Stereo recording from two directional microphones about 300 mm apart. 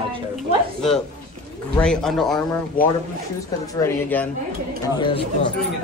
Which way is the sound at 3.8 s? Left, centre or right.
Centre.